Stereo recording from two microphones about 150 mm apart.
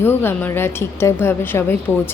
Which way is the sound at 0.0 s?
15° left (ahead or behind).